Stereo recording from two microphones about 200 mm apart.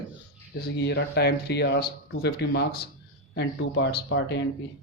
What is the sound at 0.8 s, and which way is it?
Speech, 55° left (ahead or behind).